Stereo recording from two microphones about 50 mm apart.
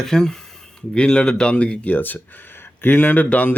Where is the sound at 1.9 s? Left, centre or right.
Left.